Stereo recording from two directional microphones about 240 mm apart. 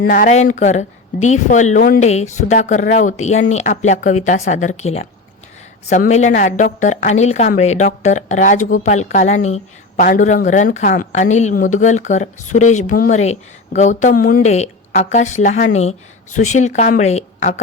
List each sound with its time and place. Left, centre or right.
0.0 s a woman's voice: left